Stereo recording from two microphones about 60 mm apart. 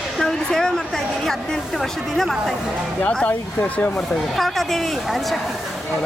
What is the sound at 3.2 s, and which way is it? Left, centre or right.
Speech, left.